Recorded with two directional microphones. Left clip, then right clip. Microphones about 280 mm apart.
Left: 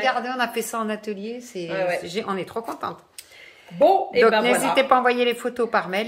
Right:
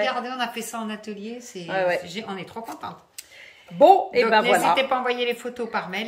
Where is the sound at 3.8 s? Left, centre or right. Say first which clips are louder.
Right 1 dB; centre.